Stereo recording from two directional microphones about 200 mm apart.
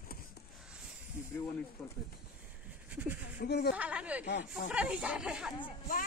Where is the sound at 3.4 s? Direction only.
55° left (ahead or behind).